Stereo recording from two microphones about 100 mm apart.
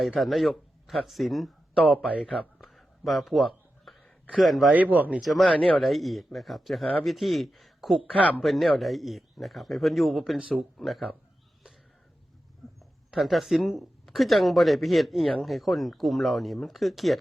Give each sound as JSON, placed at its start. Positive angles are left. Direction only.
{"t": 0.0, "sound": "speech", "side_deg": 0}
{"t": 2.4, "sound": "a sound", "side_deg": 0}
{"t": 4.7, "sound": "speech", "side_deg": -15}
{"t": 5.2, "sound": "speech", "side_deg": 0}
{"t": 13.1, "sound": "speech", "side_deg": 0}